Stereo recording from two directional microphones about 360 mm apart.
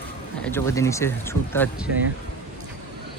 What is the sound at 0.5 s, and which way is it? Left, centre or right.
Speech, centre.